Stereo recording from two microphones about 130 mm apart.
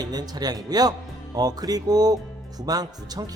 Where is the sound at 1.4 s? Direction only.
30° right (ahead or behind).